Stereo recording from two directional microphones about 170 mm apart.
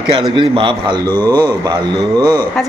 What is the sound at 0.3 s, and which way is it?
Speech, 30° right (ahead or behind).